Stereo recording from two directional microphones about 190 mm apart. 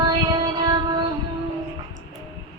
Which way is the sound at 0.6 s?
20° right (ahead or behind).